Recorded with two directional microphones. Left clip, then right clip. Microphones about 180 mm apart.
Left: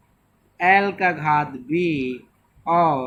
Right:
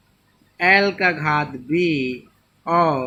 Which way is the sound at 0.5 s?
25° right (ahead or behind).